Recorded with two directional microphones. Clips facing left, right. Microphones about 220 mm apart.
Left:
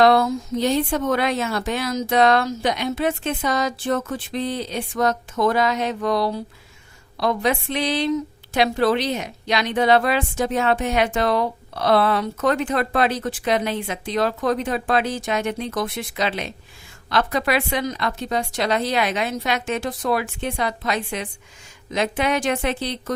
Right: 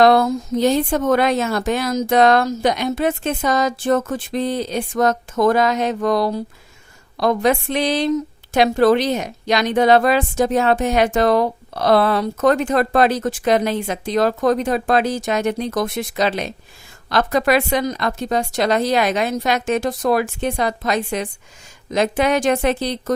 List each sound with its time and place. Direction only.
0.0 s a woman's voice: 45° right (ahead or behind)